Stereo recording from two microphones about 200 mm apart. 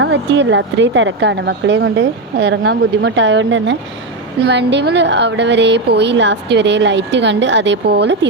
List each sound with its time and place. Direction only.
0.0 s speech: 60° right (ahead or behind)